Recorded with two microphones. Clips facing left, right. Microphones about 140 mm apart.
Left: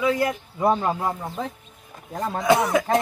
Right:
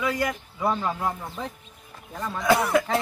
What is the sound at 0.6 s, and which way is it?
Speech, 45° left (ahead or behind).